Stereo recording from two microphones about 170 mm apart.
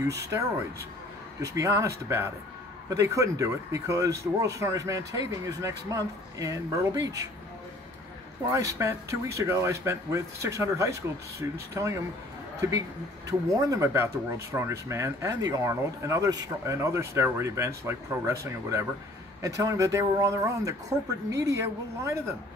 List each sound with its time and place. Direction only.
0.2 s speech: 15° right (ahead or behind)
8.5 s a man's voice: 15° right (ahead or behind)